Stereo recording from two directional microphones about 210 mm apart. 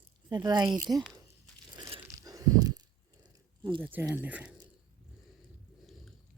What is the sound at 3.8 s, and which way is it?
Speech, 10° right (ahead or behind).